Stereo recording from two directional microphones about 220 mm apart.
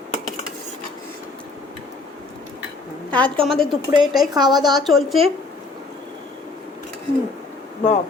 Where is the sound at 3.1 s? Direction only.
5° left (ahead or behind).